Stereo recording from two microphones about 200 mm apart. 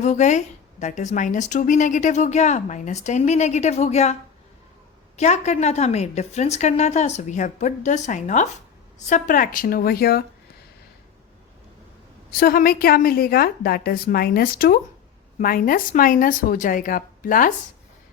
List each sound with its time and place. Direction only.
0.0 s a woman's voice: 35° left (ahead or behind)
12.3 s a woman's voice: 50° left (ahead or behind)